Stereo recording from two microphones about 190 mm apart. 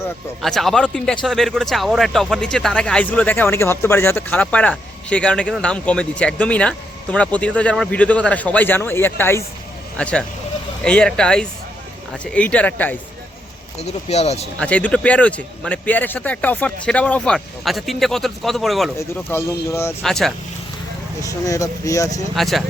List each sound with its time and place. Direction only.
0.4 s a man's voice: centre (ahead or behind)
13.7 s speech: 35° left (ahead or behind)
14.6 s speech: 5° left (ahead or behind)
18.9 s speech: 15° left (ahead or behind)
20.0 s a man's voice: centre (ahead or behind)
21.2 s speech: 15° left (ahead or behind)
22.4 s a man's voice: centre (ahead or behind)